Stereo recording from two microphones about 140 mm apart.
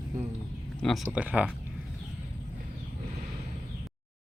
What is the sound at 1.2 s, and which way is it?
Speech, 10° right (ahead or behind).